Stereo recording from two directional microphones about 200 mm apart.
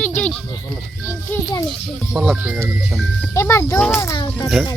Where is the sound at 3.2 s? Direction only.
10° left (ahead or behind).